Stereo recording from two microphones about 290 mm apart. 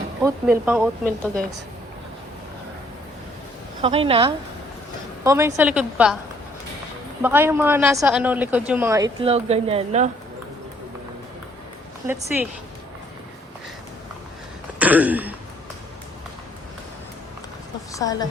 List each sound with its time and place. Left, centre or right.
0.2 s speech: centre
3.8 s a woman's voice: centre
7.2 s speech: centre
12.0 s speech: centre
14.8 s speech: centre
17.9 s a woman's voice: centre